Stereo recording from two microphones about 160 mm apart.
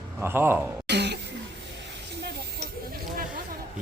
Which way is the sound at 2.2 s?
80° right.